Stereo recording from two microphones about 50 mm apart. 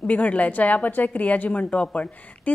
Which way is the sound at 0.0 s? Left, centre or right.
Left.